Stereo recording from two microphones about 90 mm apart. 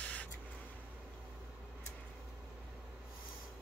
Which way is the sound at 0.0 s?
15° left (ahead or behind).